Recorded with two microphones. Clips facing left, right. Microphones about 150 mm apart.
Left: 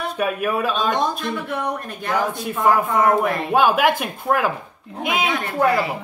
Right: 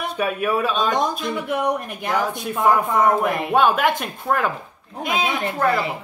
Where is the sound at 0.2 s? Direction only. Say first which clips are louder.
Even; centre (ahead or behind).